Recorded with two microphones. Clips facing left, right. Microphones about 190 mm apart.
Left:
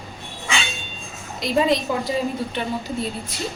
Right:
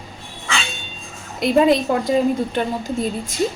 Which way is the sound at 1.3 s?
50° right (ahead or behind).